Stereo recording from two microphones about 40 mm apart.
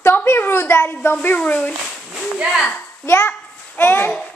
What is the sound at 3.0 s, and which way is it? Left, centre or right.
Speech, left.